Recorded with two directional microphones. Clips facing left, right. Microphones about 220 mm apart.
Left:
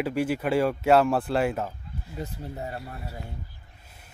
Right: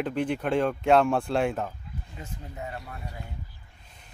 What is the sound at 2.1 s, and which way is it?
Speech, 35° left (ahead or behind).